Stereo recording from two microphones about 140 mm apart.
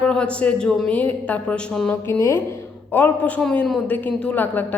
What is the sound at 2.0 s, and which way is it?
A woman's voice, 20° left (ahead or behind).